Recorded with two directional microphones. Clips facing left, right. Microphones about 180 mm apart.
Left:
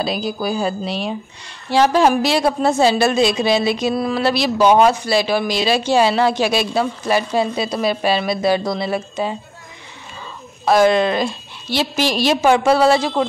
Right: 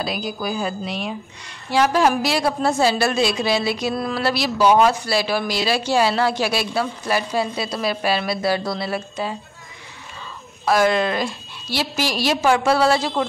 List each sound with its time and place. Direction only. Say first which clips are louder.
0.0 s a woman's voice: left 4 dB; 30° left (ahead or behind)
10.6 s a woman's voice: left 4 dB; 25° left (ahead or behind)